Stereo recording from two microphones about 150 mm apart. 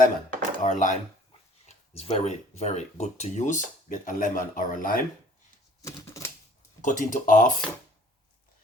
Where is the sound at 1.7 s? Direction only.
45° left (ahead or behind); by 5.0 s 65° left (ahead or behind).